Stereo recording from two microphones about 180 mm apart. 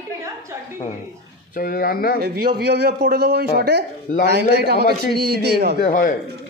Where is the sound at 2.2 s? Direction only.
60° right (ahead or behind).